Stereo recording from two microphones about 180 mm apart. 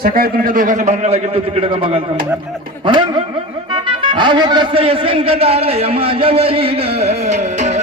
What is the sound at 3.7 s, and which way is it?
Music, 25° right (ahead or behind).